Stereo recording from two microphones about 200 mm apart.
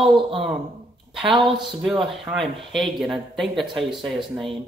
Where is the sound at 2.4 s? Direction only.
Centre (ahead or behind).